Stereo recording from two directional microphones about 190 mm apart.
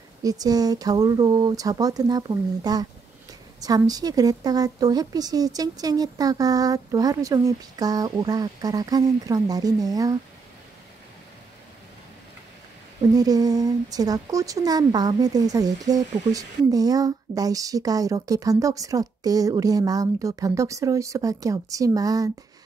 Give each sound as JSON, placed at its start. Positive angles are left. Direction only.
{"t": 0.2, "sound": "speech", "side_deg": -20}
{"t": 13.1, "sound": "speech", "side_deg": -20}